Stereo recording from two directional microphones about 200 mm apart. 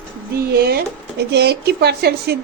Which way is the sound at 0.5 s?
50° right (ahead or behind).